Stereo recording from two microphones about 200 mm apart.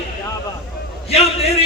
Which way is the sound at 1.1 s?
30° left (ahead or behind).